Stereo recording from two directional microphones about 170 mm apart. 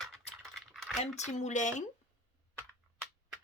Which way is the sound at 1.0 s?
40° left (ahead or behind).